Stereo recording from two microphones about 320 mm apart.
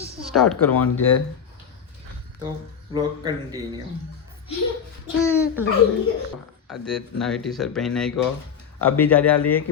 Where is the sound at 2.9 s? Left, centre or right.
Centre.